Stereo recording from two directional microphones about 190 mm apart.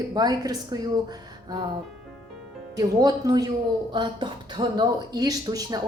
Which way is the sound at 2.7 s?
20° right (ahead or behind).